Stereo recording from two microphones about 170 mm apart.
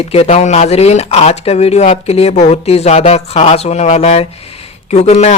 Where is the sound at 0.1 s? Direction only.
40° left (ahead or behind).